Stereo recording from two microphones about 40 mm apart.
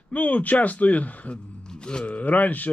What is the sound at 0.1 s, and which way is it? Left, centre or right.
Speech, left.